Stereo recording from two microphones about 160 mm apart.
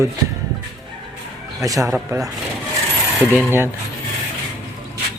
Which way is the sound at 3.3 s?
10° right (ahead or behind).